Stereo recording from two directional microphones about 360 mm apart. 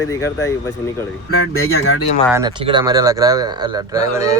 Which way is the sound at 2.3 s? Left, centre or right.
Centre.